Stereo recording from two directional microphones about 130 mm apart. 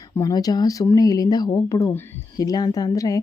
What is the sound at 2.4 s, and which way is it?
Speech, 30° left (ahead or behind).